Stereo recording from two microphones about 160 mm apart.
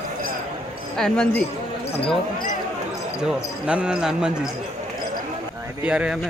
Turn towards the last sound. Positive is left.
turn(degrees=-5)  # may be behind; listen again after turning